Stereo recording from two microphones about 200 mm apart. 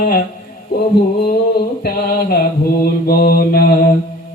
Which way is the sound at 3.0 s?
50° left (ahead or behind).